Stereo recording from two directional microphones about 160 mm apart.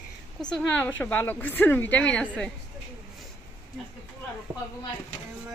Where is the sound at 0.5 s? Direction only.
10° left (ahead or behind).